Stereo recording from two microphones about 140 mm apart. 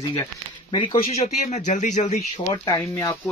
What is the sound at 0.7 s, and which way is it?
Speech, 35° left (ahead or behind).